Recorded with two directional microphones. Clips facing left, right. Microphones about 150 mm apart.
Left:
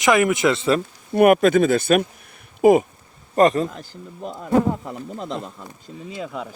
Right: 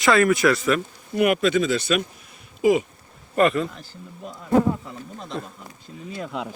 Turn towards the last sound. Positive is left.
turn(degrees=10)  # may be behind; listen again after turning